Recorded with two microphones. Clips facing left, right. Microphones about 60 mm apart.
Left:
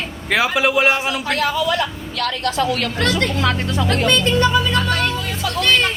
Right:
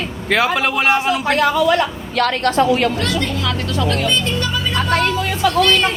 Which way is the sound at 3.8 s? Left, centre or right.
Left.